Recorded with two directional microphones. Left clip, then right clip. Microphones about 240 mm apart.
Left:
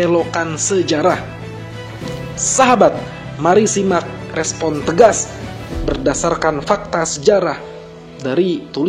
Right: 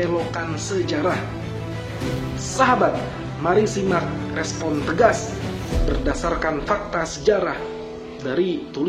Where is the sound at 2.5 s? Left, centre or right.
Left.